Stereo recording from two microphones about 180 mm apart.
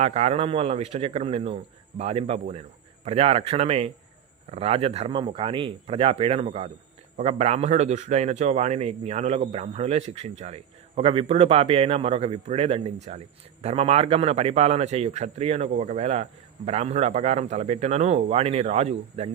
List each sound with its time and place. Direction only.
0.0 s a man's voice: 40° right (ahead or behind)